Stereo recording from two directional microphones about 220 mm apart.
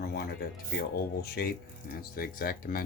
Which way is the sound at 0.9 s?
45° left (ahead or behind).